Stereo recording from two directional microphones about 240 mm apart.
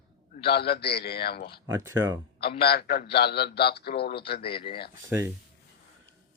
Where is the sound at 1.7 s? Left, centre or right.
Centre.